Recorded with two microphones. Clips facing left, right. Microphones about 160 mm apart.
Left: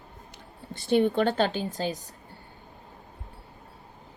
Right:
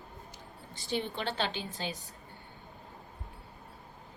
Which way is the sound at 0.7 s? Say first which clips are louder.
Left 12 dB; 55° left (ahead or behind).